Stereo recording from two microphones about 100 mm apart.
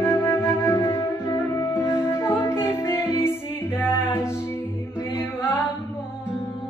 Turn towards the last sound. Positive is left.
turn(degrees=25)  # may be behind; listen again after turning